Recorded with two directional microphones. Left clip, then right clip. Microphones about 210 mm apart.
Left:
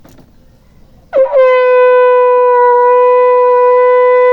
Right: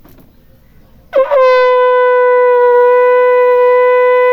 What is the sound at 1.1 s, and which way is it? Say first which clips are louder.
Shofar: left 1 dB; 35° right (ahead or behind).